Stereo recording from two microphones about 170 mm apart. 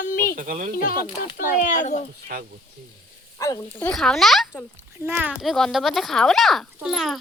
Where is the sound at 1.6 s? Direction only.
45° left (ahead or behind).